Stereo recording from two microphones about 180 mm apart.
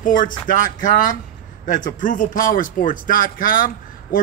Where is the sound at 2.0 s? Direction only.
45° left (ahead or behind).